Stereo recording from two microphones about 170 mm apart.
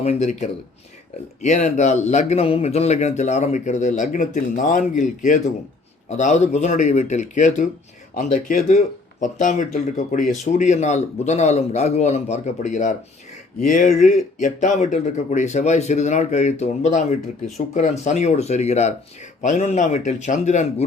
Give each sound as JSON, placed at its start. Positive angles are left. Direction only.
{"t": 0.0, "sound": "speech", "side_deg": 40}